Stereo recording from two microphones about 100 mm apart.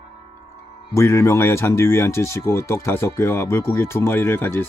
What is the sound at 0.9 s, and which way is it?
Speech, 30° left (ahead or behind).